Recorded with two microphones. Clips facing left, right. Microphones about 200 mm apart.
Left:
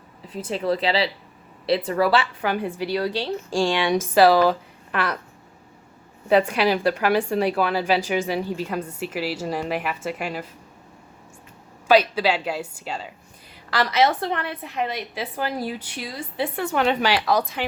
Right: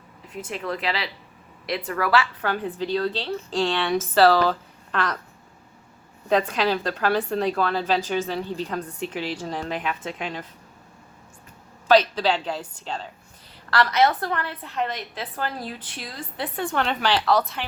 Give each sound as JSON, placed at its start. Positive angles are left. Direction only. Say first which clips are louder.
{"t": 0.3, "sound": "speech", "louder": "left 6 dB", "side_deg": 30}
{"t": 2.4, "sound": "a woman's voice", "louder": "left 2 dB", "side_deg": 10}
{"t": 6.2, "sound": "a woman's voice", "louder": "left 3 dB", "side_deg": 10}
{"t": 11.9, "sound": "a woman's voice", "louder": "left 1 dB", "side_deg": 10}
{"t": 14.1, "sound": "a woman's voice", "louder": "left 2 dB", "side_deg": 25}